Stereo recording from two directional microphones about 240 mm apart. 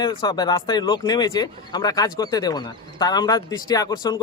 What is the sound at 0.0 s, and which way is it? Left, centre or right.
Speech, centre.